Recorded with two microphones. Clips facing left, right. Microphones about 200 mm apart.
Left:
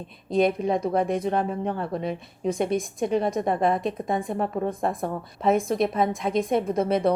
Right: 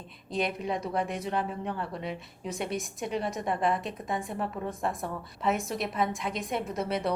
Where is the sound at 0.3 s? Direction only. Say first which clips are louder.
Left 9 dB; 50° left (ahead or behind).